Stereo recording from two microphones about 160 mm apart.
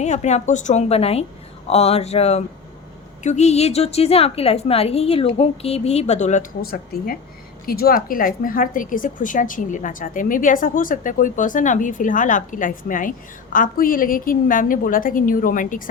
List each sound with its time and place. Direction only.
0.0 s a woman's voice: 45° left (ahead or behind)
6.6 s a woman's voice: 65° left (ahead or behind)